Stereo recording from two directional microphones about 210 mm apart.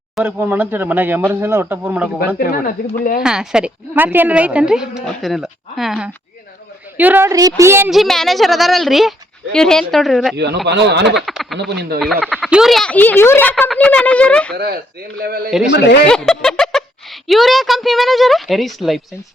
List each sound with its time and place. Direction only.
0.2 s speech: 10° right (ahead or behind)
2.4 s speech: 45° left (ahead or behind)
3.2 s a woman's voice: 5° right (ahead or behind)
10.3 s speech: 55° right (ahead or behind)
11.3 s a sound: centre (ahead or behind)
11.7 s speech: 50° right (ahead or behind)
11.9 s a woman's voice: centre (ahead or behind)
14.5 s speech: 50° right (ahead or behind)
15.4 s a woman's voice: centre (ahead or behind)
15.7 s speech: 55° left (ahead or behind)
16.0 s a woman's voice: 5° left (ahead or behind)